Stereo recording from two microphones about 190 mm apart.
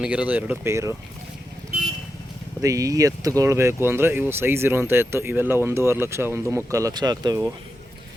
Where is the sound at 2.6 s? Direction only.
15° right (ahead or behind).